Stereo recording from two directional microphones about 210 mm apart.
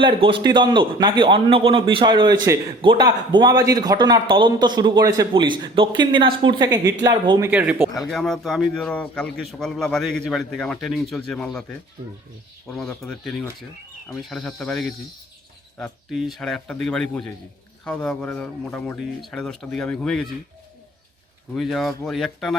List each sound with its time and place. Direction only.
0.0 s a man's voice: 25° right (ahead or behind); by 20.2 s 5° left (ahead or behind)
21.5 s a man's voice: centre (ahead or behind)